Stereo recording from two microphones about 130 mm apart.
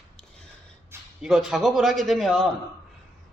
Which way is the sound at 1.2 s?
5° right (ahead or behind).